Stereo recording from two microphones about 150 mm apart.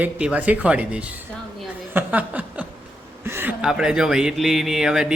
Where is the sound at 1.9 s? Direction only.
10° right (ahead or behind).